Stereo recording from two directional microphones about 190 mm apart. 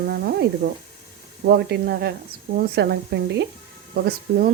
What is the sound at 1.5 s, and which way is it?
Speech, 60° right (ahead or behind).